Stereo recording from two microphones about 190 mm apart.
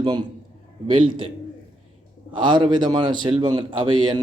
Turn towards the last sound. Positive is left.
turn(degrees=-25)  # may be behind; listen again after turning